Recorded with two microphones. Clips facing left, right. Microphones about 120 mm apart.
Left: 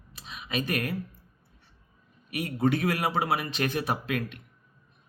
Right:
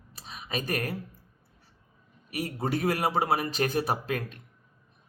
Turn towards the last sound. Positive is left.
turn(degrees=-35)  # may be behind; listen again after turning